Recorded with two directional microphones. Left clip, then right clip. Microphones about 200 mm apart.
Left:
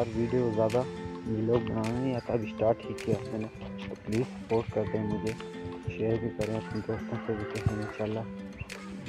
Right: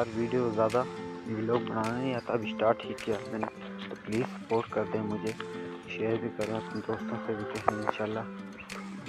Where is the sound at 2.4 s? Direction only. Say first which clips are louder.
Right 1 dB; 15° left (ahead or behind).